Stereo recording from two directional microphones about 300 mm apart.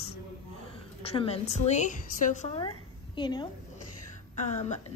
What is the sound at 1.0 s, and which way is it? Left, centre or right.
A woman's voice, centre.